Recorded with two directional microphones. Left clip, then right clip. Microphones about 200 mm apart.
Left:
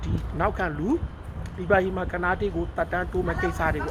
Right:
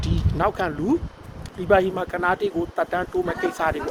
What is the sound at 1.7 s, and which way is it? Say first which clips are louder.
Speech: right 4 dB; 15° right (ahead or behind).